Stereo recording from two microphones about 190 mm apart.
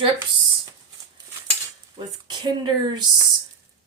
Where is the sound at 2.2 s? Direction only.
25° right (ahead or behind).